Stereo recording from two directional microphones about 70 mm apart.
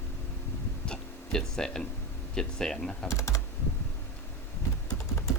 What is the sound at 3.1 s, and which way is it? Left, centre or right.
Typing, left.